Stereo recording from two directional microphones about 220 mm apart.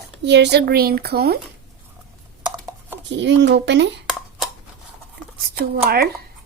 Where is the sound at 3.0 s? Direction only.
55° right (ahead or behind).